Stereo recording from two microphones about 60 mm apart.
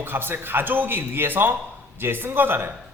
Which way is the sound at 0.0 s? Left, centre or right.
Right.